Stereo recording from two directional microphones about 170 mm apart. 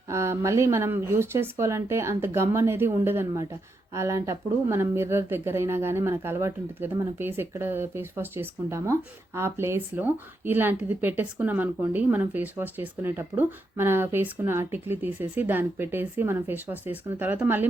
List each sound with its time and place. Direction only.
0.1 s speech: 15° right (ahead or behind)